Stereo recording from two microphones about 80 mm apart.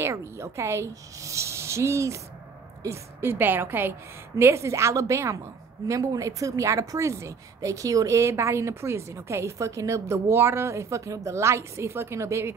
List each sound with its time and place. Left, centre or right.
0.0 s a woman's voice: right
4.4 s a woman's voice: right